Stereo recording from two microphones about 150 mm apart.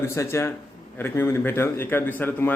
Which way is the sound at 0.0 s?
20° left (ahead or behind).